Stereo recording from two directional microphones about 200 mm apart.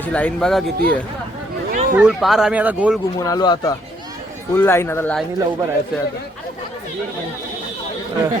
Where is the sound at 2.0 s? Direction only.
5° right (ahead or behind).